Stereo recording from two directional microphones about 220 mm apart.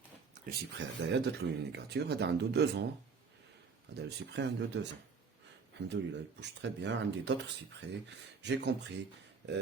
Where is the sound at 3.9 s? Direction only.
50° right (ahead or behind).